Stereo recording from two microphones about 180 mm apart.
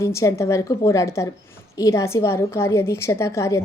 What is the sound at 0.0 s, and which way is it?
A woman's voice, 15° left (ahead or behind).